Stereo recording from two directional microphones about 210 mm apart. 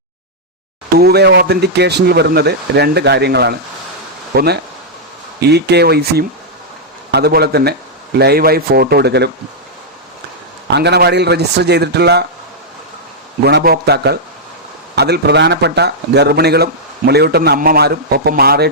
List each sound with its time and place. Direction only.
0.9 s speech: 50° right (ahead or behind)
10.7 s speech: 50° right (ahead or behind)
13.4 s speech: 50° right (ahead or behind)